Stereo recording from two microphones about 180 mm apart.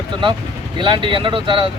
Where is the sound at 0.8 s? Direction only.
25° right (ahead or behind).